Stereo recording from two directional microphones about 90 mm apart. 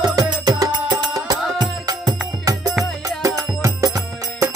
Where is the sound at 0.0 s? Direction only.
50° right (ahead or behind).